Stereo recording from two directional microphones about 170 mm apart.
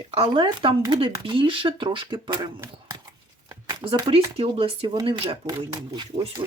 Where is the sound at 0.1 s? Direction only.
30° right (ahead or behind).